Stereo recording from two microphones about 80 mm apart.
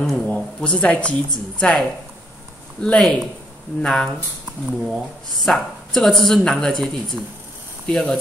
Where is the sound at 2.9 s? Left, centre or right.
Centre.